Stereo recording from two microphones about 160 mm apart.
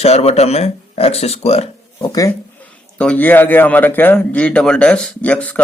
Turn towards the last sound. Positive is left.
turn(degrees=10)  # may be behind; listen again after turning